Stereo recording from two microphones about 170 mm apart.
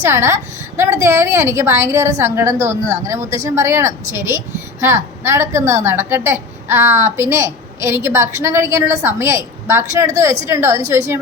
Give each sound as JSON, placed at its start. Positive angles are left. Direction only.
{"t": 0.0, "sound": "a woman's voice", "side_deg": -15}